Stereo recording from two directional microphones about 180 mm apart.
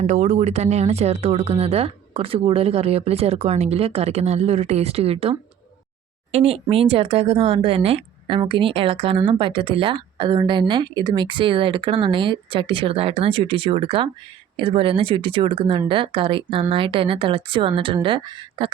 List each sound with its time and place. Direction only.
0.0 s speech: 40° right (ahead or behind)